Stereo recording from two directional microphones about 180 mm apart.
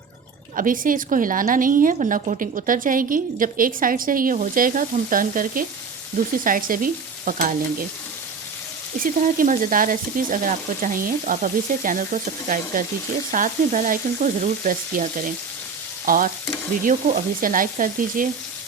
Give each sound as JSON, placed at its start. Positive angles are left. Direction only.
{"t": 0.5, "sound": "a woman's voice", "side_deg": -50}
{"t": 9.0, "sound": "a woman's voice", "side_deg": -45}
{"t": 17.4, "sound": "a woman's voice", "side_deg": -50}